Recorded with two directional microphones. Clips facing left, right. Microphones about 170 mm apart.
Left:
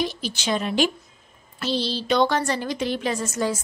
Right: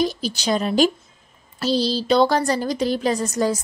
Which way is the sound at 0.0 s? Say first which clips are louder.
Right 4 dB; 40° right (ahead or behind).